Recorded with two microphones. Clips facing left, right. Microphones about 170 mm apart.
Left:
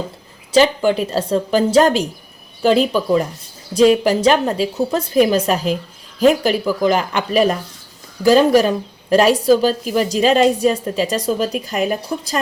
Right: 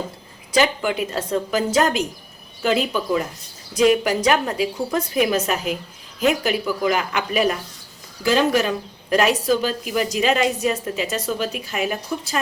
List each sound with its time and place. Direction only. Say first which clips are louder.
0.5 s a woman's voice: left 6 dB; 30° left (ahead or behind)